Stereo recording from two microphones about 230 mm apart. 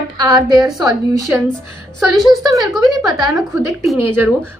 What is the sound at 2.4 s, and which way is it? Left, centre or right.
A woman's voice, centre.